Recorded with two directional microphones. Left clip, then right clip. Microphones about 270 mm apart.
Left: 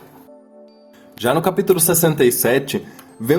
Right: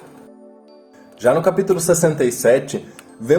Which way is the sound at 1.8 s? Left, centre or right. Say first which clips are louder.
Right 2 dB; left.